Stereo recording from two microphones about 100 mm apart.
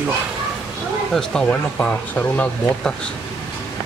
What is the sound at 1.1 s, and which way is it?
Speech, 5° left (ahead or behind).